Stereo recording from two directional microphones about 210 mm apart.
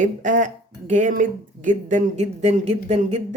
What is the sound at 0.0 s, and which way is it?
Speech, 40° right (ahead or behind).